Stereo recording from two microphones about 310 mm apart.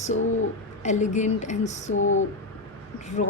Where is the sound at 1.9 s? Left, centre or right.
Left.